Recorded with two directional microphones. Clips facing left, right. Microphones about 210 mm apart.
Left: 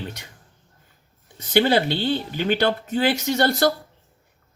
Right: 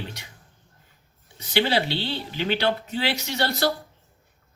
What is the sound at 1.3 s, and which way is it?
Speech, 50° left (ahead or behind).